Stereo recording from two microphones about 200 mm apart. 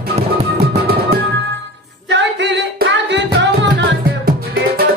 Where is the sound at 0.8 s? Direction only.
55° right (ahead or behind).